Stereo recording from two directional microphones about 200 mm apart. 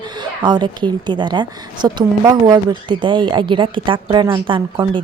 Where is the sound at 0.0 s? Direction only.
20° right (ahead or behind).